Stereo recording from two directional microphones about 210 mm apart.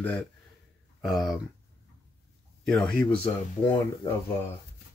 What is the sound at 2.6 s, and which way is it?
Speech, centre (ahead or behind).